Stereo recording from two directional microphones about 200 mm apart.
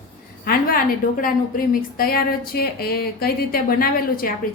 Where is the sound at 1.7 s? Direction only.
45° left (ahead or behind).